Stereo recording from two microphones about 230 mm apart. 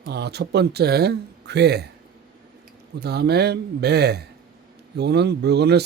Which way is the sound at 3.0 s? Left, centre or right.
Right.